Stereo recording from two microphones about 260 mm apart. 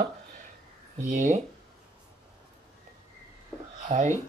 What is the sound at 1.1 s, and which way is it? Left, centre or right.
Speech, right.